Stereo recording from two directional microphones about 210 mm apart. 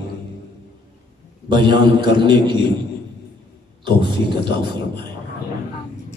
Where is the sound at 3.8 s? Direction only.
20° right (ahead or behind).